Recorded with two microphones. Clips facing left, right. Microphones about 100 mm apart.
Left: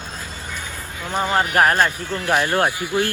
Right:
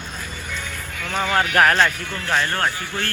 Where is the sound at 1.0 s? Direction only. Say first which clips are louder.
Left 1 dB; 15° left (ahead or behind).